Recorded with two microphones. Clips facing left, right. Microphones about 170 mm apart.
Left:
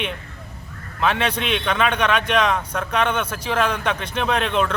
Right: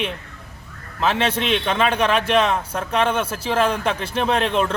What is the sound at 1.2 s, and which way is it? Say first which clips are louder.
A man's voice: right 2 dB; 30° right (ahead or behind).